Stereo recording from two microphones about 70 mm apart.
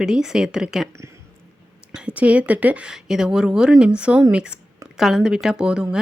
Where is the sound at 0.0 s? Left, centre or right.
Centre.